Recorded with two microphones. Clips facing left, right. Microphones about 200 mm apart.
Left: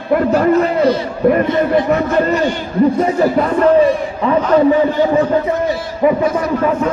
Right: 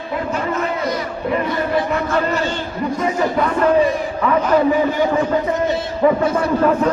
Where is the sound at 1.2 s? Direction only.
50° left (ahead or behind).